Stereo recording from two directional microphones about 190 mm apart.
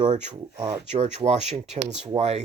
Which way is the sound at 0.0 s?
30° right (ahead or behind).